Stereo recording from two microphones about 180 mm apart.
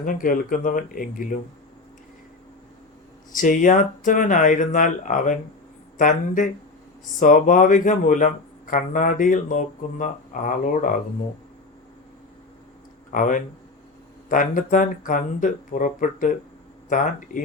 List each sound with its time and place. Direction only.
0.0 s speech: 50° left (ahead or behind)
3.3 s speech: 45° left (ahead or behind)
13.1 s speech: 45° left (ahead or behind)